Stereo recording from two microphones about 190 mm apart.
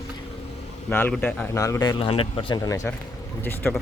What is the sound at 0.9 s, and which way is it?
Speech, 10° left (ahead or behind).